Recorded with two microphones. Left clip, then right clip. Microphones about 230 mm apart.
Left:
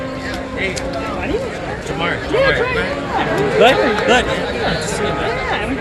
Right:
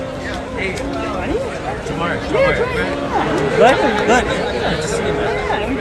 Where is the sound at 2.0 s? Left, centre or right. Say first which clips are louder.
Left 1 dB; centre.